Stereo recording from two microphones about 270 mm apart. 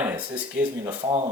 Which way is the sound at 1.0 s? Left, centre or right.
Centre.